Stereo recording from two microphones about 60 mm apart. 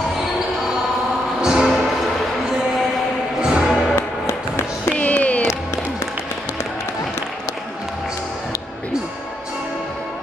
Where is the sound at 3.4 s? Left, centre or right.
Centre.